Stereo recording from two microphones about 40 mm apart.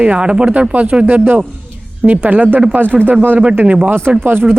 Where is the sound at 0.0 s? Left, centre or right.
Right.